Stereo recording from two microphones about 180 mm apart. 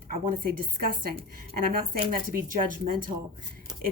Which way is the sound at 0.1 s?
50° right (ahead or behind).